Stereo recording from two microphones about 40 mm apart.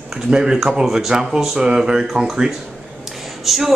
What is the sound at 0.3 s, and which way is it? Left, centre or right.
Speech, centre.